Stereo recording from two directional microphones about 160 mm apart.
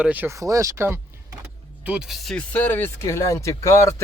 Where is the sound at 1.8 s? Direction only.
5° right (ahead or behind); by 3.9 s 20° left (ahead or behind).